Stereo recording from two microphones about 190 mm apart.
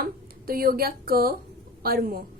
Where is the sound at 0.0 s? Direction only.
50° right (ahead or behind).